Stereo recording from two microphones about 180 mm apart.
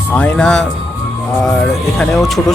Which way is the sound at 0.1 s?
5° left (ahead or behind).